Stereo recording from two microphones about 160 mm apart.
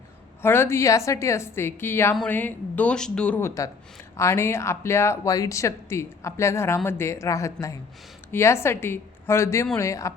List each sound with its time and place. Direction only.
0.4 s speech: 15° left (ahead or behind)